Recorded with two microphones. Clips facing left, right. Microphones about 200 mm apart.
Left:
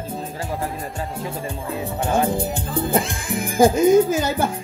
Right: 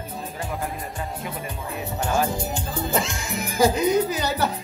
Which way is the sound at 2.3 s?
55° left (ahead or behind).